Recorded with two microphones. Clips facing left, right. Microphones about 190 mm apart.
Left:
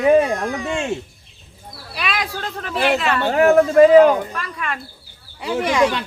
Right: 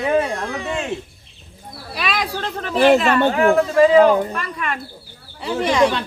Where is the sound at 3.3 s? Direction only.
40° left (ahead or behind).